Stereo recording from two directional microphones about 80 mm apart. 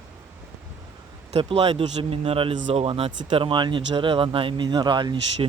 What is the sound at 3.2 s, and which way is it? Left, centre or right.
Speech, right.